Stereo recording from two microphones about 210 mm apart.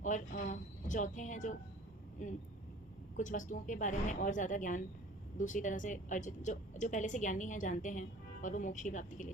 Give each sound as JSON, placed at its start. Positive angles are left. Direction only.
{"t": 0.0, "sound": "a woman's voice", "side_deg": 40}